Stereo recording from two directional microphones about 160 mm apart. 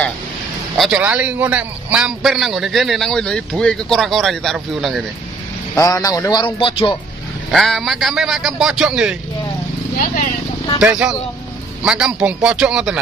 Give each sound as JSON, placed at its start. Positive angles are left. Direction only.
{"t": 0.7, "sound": "a man's voice", "side_deg": -5}
{"t": 5.8, "sound": "a man's voice", "side_deg": 20}
{"t": 7.5, "sound": "a man's voice", "side_deg": 0}
{"t": 10.8, "sound": "a man's voice", "side_deg": -5}